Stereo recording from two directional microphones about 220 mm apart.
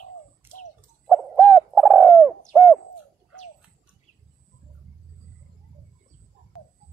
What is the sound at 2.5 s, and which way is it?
Owl, centre (ahead or behind).